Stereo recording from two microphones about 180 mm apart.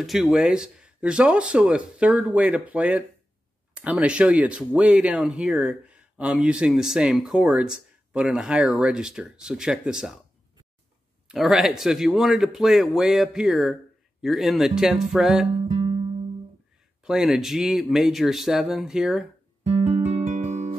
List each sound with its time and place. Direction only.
0.0 s speech: centre (ahead or behind)
11.2 s speech: centre (ahead or behind)
15.7 s music: 30° right (ahead or behind)
17.0 s speech: 5° right (ahead or behind)
19.8 s music: 35° right (ahead or behind)